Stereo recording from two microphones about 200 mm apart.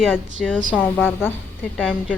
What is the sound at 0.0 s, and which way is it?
A woman's voice, centre (ahead or behind).